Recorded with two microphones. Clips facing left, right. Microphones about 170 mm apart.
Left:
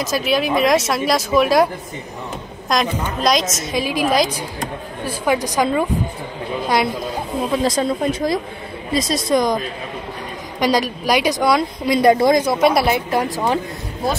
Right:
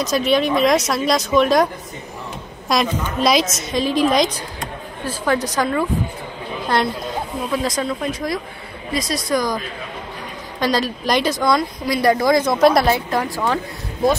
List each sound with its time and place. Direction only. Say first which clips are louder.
0.0 s speech: right 2 dB; 5° left (ahead or behind)
2.7 s speech: even; centre (ahead or behind); by 5.9 s 15° left (ahead or behind)
7.6 s speech: left 4 dB; 30° left (ahead or behind)
10.6 s speech: left 2 dB; 15° left (ahead or behind)
11.8 s speech: left 6 dB; 20° left (ahead or behind)
12.5 s speech: right 1 dB; centre (ahead or behind)
12.8 s speech: left 1 dB; 15° left (ahead or behind)